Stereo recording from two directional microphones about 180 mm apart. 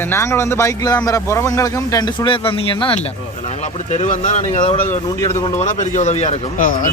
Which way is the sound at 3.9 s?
40° left (ahead or behind).